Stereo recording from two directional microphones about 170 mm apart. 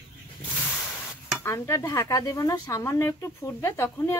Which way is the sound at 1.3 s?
15° left (ahead or behind).